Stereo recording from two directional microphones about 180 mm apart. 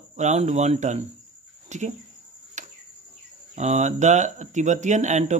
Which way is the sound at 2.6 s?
40° right (ahead or behind).